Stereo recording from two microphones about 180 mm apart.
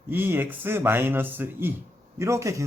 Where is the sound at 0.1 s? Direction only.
10° right (ahead or behind).